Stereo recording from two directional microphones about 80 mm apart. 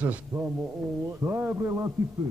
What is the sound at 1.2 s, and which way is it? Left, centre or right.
Speech, right.